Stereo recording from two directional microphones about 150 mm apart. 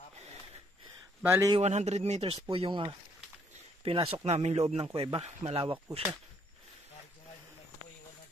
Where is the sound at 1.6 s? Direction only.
45° right (ahead or behind).